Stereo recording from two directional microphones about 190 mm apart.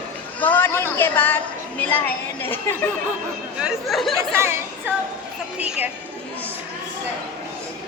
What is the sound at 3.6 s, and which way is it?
Speech, 5° right (ahead or behind).